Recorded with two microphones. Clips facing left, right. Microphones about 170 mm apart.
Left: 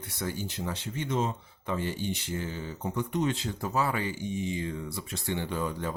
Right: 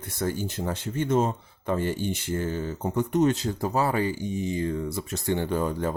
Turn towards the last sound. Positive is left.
turn(degrees=-45)  # may be behind; listen again after turning